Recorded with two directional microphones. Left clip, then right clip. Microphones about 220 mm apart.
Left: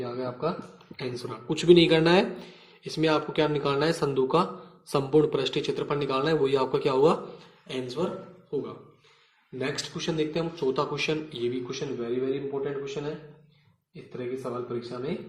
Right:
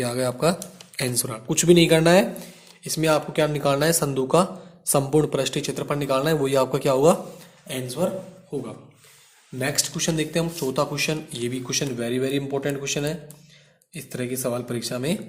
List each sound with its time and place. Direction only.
0.0 s speech: 40° right (ahead or behind); by 8.0 s 15° right (ahead or behind)
9.6 s speech: 25° right (ahead or behind)
11.7 s a man's voice: 40° right (ahead or behind)
14.8 s speech: 40° right (ahead or behind)